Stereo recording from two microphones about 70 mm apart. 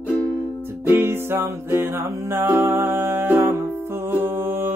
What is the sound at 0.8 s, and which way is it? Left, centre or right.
Music, right.